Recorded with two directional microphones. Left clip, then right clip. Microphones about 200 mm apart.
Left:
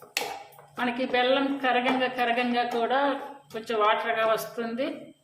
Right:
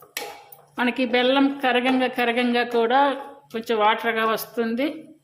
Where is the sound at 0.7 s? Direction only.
50° right (ahead or behind).